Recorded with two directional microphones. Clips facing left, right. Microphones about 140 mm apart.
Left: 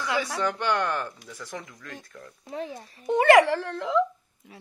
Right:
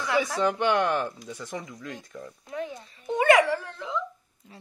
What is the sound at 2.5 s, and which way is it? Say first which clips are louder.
Speech: even; 35° left (ahead or behind).